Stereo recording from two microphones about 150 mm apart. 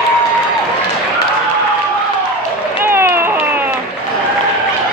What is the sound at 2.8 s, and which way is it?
Run, 15° right (ahead or behind).